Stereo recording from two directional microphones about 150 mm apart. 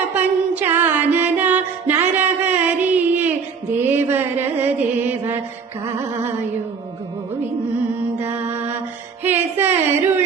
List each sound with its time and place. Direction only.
0.1 s music: 15° right (ahead or behind)
3.8 s mantra: 15° right (ahead or behind)
8.2 s mantra: 15° right (ahead or behind)
9.2 s a sound: 15° right (ahead or behind)